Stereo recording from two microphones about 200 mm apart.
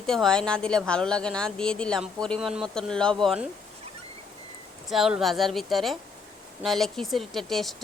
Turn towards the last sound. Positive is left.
turn(degrees=0)  # may be behind; listen again after turning